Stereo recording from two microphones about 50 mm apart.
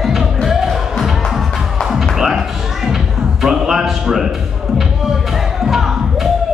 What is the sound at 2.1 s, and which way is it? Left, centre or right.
Music, centre.